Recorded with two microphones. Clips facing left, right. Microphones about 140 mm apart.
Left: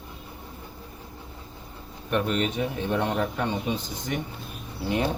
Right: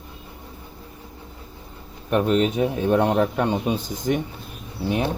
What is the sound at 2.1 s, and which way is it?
A man's voice, 35° right (ahead or behind).